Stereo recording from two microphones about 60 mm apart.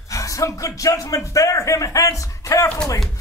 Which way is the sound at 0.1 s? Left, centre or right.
Left.